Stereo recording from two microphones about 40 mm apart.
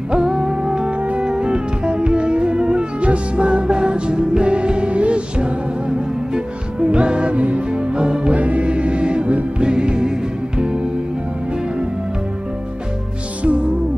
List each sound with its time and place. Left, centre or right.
0.1 s music: right
0.9 s music: right
1.2 s music: right
8.4 s music: right